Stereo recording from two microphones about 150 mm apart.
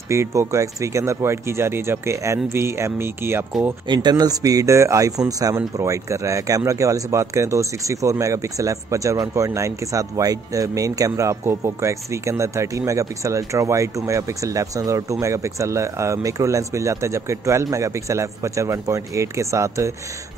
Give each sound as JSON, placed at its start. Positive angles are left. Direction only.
{"t": 0.1, "sound": "speech", "side_deg": -20}
{"t": 3.8, "sound": "speech", "side_deg": -30}